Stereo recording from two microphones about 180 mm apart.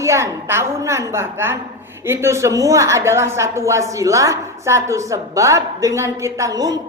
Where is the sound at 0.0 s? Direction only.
15° right (ahead or behind).